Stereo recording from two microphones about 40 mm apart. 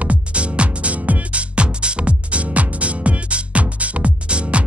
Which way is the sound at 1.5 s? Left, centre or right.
Right.